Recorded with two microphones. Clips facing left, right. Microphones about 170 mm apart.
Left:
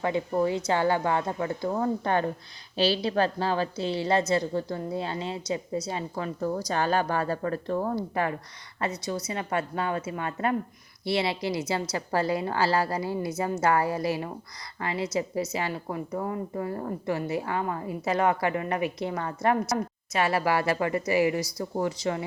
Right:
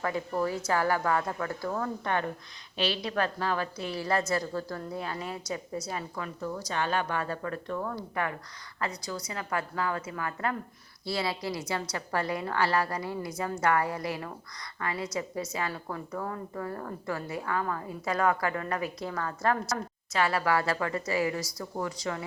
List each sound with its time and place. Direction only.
0.0 s a woman's voice: 20° left (ahead or behind)
6.4 s a woman's voice: 40° left (ahead or behind); by 22.2 s 25° left (ahead or behind)